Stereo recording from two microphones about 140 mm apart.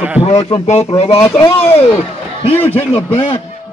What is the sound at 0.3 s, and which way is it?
A man's voice, 45° left (ahead or behind).